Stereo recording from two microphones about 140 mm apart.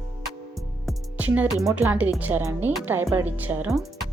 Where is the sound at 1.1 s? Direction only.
10° right (ahead or behind).